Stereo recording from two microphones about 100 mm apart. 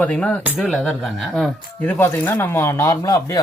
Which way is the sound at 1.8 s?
20° left (ahead or behind).